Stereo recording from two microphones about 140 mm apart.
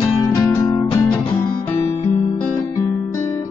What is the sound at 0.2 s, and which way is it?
Music, 25° left (ahead or behind).